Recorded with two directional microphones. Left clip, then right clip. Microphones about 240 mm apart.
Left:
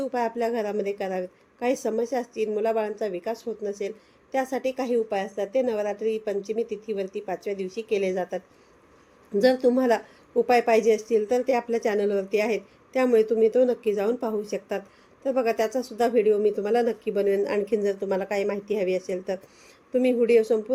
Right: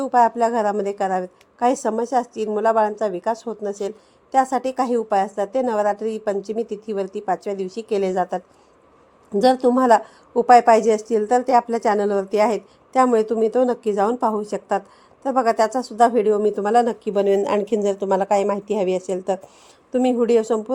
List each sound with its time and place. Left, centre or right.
0.0 s a woman's voice: right
9.4 s a woman's voice: right